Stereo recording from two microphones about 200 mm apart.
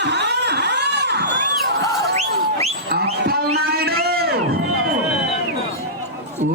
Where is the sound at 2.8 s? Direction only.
50° right (ahead or behind).